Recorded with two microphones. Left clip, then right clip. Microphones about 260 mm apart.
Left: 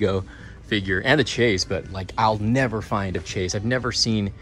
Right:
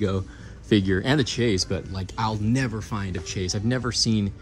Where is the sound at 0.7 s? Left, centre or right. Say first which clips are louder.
Left 2 dB; right.